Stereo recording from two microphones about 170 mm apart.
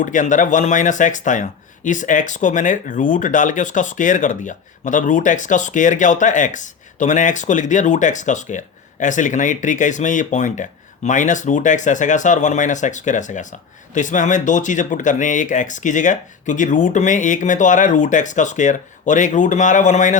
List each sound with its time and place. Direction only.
0.0 s speech: 50° left (ahead or behind)